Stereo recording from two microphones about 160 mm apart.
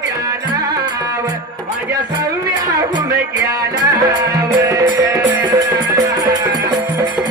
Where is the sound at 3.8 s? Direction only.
25° right (ahead or behind).